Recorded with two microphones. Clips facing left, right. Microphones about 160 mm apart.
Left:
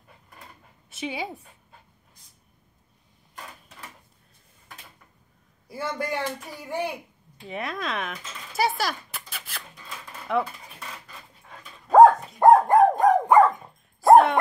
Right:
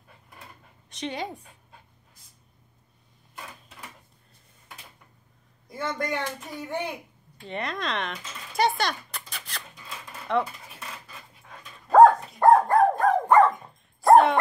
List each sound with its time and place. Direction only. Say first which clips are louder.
0.8 s speech: even; 5° left (ahead or behind)
5.7 s speech: even; 10° left (ahead or behind)
7.4 s a sound: even; 5° left (ahead or behind)
11.9 s dog: left 1 dB; 15° left (ahead or behind)
14.0 s dog: left 2 dB; centre (ahead or behind)